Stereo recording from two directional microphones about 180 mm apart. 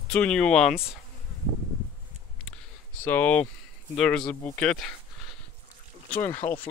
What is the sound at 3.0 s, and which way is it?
Speech, 10° left (ahead or behind).